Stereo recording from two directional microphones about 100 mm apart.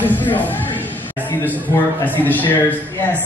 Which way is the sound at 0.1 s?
20° left (ahead or behind).